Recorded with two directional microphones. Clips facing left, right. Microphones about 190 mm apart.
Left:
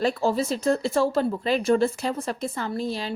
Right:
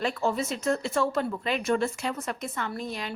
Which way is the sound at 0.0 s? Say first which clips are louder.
Left 4 dB; 35° left (ahead or behind).